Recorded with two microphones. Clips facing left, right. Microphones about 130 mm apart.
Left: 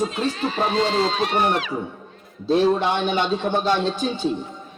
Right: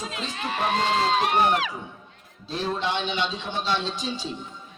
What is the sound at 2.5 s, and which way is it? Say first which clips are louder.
A man's voice: left 9 dB; 55° left (ahead or behind).